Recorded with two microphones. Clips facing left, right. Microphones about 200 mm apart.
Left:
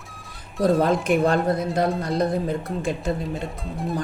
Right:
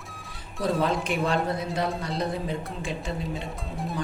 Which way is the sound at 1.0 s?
50° left (ahead or behind).